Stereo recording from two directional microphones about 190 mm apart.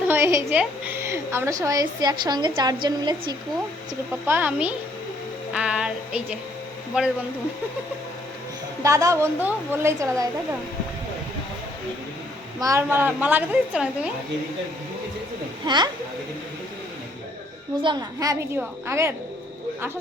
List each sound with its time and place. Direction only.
0.1 s a woman's voice: 15° right (ahead or behind)
4.3 s a woman's voice: 10° right (ahead or behind)
5.5 s music: 5° right (ahead or behind)
8.8 s a woman's voice: 15° right (ahead or behind)
12.5 s a woman's voice: 15° right (ahead or behind)
15.6 s a woman's voice: 25° right (ahead or behind)
17.8 s a woman's voice: 20° right (ahead or behind)